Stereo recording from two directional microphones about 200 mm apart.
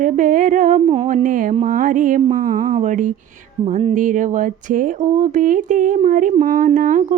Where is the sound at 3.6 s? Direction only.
30° right (ahead or behind).